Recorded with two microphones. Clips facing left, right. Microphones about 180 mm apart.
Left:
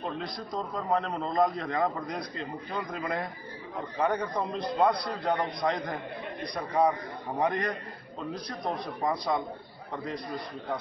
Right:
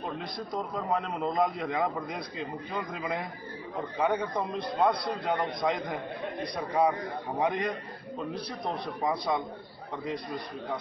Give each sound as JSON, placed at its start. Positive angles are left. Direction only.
{"t": 0.2, "sound": "a man's voice", "side_deg": 0}
{"t": 4.4, "sound": "a man's voice", "side_deg": -15}
{"t": 5.2, "sound": "a man's voice", "side_deg": 0}
{"t": 8.7, "sound": "a man's voice", "side_deg": 0}